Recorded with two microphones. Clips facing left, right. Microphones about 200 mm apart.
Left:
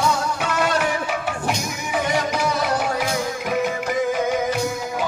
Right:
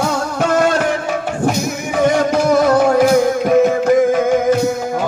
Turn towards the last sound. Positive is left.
turn(degrees=-50)  # may be behind; listen again after turning